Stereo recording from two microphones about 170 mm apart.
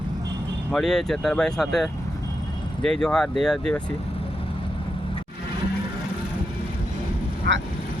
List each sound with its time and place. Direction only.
0.7 s speech: 5° left (ahead or behind)
7.5 s speech: 80° right